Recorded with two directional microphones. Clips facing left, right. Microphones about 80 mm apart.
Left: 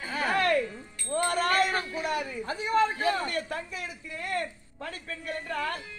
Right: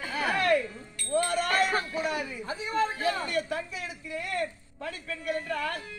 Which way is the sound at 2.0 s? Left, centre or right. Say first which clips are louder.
Left 1 dB; left.